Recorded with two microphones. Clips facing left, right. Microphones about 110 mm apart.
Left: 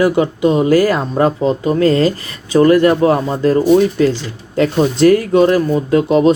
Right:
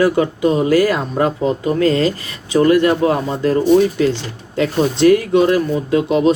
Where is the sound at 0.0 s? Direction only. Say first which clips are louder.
Left 2 dB; 25° left (ahead or behind).